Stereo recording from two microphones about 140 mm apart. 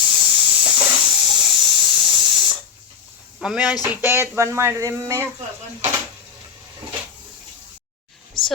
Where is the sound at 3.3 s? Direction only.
5° right (ahead or behind).